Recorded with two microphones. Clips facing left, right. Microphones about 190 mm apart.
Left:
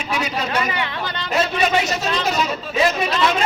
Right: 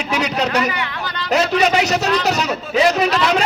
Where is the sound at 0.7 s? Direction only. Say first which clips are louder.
Right 1 dB; 25° left (ahead or behind).